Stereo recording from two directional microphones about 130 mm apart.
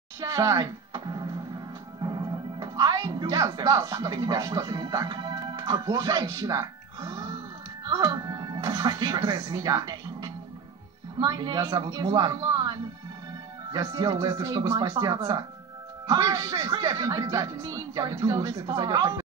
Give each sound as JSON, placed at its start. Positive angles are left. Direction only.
{"t": 0.2, "sound": "speech", "side_deg": -25}